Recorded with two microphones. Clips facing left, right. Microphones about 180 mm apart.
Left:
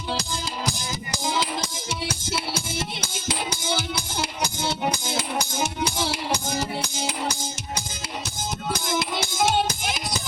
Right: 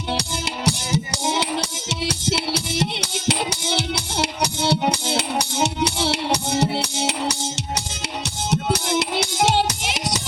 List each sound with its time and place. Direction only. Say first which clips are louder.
0.2 s music: right 3 dB; 70° right (ahead or behind)
8.4 s music: right 6 dB; 70° right (ahead or behind)